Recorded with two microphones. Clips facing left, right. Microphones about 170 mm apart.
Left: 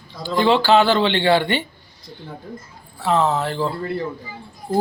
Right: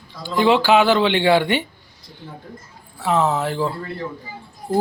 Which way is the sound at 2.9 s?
10° right (ahead or behind).